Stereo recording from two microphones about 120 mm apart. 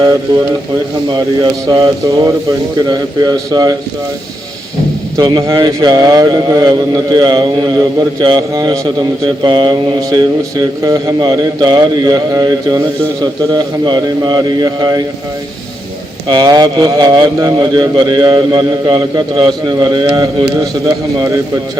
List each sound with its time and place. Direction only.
1.1 s speech: 30° right (ahead or behind)
5.1 s a man's voice: 30° right (ahead or behind)
10.0 s a man's voice: 25° right (ahead or behind)
13.8 s a man's voice: 40° right (ahead or behind)
16.3 s a man's voice: 35° right (ahead or behind)
20.1 s speech: 25° right (ahead or behind)